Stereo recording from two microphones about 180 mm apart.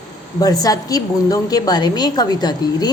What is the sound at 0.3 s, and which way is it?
A woman's voice, 20° left (ahead or behind).